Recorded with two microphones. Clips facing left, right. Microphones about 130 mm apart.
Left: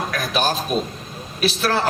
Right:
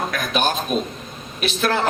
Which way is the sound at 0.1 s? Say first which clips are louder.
Even; 35° left (ahead or behind).